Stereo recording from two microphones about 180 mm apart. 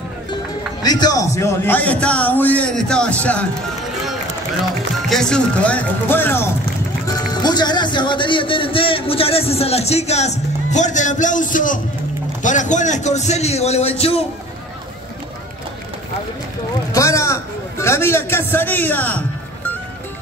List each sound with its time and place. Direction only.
0.8 s a man's voice: 20° left (ahead or behind)
5.1 s a man's voice: 5° left (ahead or behind)
7.4 s speech: 25° left (ahead or behind)
16.9 s a man's voice: 15° left (ahead or behind)